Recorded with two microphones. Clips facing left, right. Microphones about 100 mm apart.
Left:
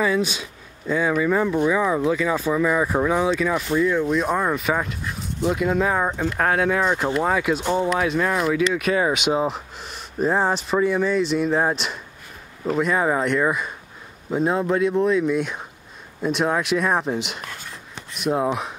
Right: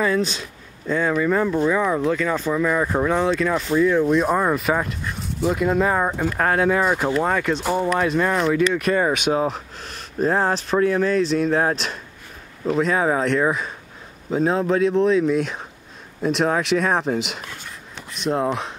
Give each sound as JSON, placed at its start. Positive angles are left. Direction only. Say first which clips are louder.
{"t": 0.0, "sound": "speech", "louder": "even", "side_deg": 10}
{"t": 7.2, "sound": "speech", "louder": "even", "side_deg": 5}